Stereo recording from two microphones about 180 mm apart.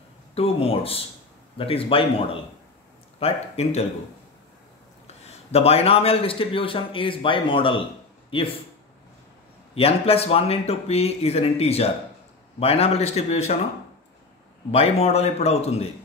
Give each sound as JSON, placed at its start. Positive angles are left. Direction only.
{"t": 0.3, "sound": "speech", "side_deg": 35}
{"t": 5.0, "sound": "a man's voice", "side_deg": 35}
{"t": 9.8, "sound": "speech", "side_deg": 35}
{"t": 14.7, "sound": "speech", "side_deg": 35}